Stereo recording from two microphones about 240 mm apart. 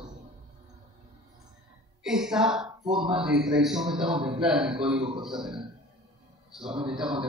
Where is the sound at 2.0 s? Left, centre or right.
Centre.